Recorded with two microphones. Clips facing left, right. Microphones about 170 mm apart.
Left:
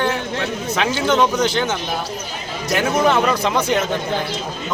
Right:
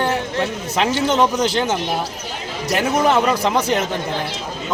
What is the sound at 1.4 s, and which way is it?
Speech, 35° right (ahead or behind).